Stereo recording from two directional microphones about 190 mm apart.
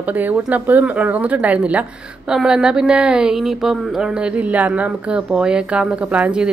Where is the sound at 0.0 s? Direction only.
10° right (ahead or behind).